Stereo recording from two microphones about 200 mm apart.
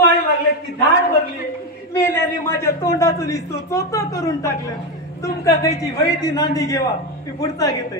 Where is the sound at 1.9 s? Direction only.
10° left (ahead or behind).